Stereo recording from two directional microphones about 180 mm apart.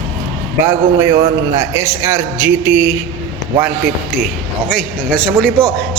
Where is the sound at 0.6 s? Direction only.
15° right (ahead or behind).